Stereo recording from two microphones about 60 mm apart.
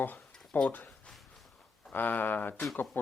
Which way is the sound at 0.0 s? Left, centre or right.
Left.